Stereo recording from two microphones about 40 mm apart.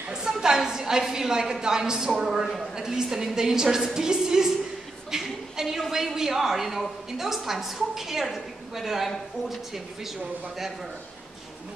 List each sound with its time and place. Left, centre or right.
0.1 s a woman's voice: centre